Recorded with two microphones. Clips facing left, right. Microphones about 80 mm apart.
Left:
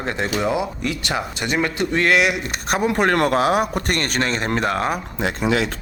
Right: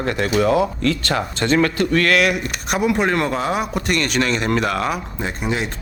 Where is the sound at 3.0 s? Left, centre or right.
Left.